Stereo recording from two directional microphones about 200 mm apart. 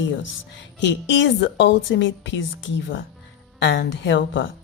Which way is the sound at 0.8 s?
65° left (ahead or behind).